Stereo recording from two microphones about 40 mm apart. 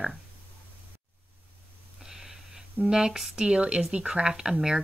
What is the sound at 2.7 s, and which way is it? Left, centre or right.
Speech, centre.